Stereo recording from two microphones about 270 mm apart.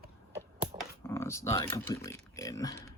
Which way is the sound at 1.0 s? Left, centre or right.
Centre.